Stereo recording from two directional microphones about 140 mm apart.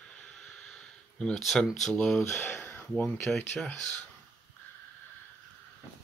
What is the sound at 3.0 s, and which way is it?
Speech, 5° left (ahead or behind).